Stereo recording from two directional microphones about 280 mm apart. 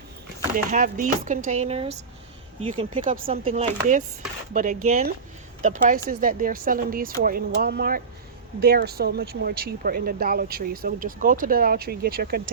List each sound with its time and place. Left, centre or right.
0.5 s speech: right